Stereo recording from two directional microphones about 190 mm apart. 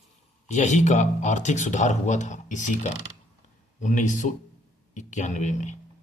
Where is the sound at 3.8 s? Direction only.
40° left (ahead or behind).